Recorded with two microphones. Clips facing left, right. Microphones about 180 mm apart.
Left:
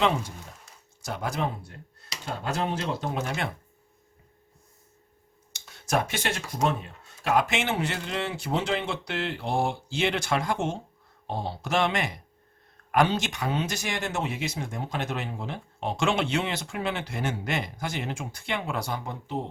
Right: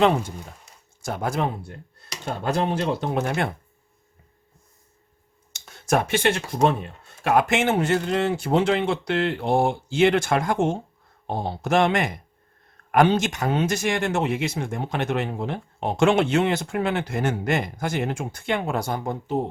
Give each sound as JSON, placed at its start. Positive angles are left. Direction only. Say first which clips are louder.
{"t": 1.0, "sound": "speech", "louder": "right 5 dB", "side_deg": -50}
{"t": 5.5, "sound": "speech", "louder": "right 5 dB", "side_deg": -55}